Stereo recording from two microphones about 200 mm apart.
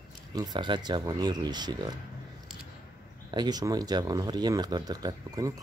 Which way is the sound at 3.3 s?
20° right (ahead or behind).